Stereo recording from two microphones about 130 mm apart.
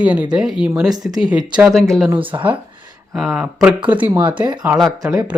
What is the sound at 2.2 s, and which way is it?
Speech, 40° right (ahead or behind).